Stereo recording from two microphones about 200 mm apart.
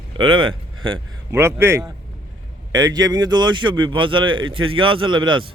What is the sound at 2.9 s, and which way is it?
A man's voice, 20° right (ahead or behind).